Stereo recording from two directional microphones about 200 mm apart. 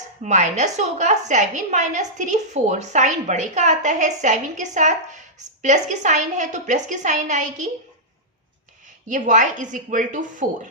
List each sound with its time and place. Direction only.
0.2 s a woman's voice: 35° right (ahead or behind)
9.0 s a woman's voice: 40° right (ahead or behind)